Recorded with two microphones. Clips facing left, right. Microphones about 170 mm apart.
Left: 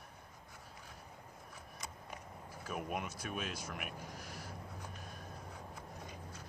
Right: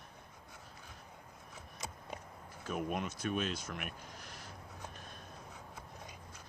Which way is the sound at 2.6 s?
Centre (ahead or behind).